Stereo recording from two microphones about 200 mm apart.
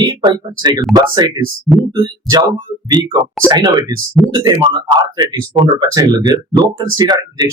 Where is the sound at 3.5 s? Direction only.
20° right (ahead or behind).